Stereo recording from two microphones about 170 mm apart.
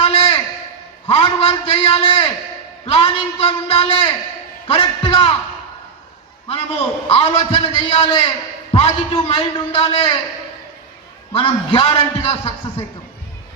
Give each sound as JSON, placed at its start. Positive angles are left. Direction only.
{"t": 0.0, "sound": "a sound", "side_deg": 35}
{"t": 1.0, "sound": "a man's voice", "side_deg": 35}
{"t": 7.1, "sound": "a man's voice", "side_deg": 35}
{"t": 11.3, "sound": "a man's voice", "side_deg": 30}